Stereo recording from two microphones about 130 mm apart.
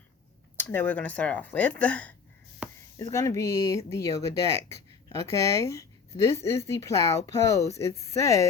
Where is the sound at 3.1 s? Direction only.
25° left (ahead or behind).